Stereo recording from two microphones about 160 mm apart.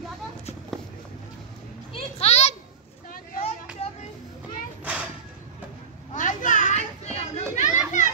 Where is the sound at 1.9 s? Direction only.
40° left (ahead or behind).